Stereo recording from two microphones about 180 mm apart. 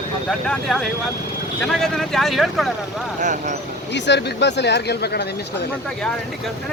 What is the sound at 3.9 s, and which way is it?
Speech, 75° left (ahead or behind).